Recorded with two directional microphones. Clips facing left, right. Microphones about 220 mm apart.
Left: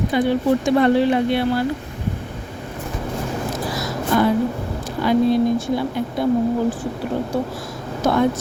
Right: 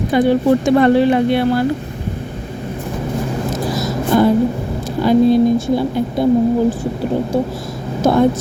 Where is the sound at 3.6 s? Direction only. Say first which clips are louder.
Right 6 dB; 20° right (ahead or behind).